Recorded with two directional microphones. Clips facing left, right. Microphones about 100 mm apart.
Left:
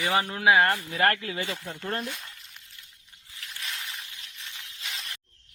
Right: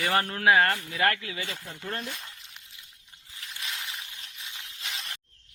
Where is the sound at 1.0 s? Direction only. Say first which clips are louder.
Left 2 dB; 40° left (ahead or behind).